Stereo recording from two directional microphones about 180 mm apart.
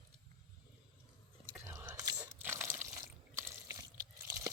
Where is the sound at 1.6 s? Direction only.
15° right (ahead or behind).